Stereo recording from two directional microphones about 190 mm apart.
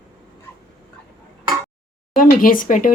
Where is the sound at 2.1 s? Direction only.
45° left (ahead or behind).